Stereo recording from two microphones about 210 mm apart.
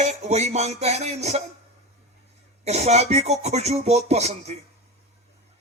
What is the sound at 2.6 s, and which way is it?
Music, 30° right (ahead or behind).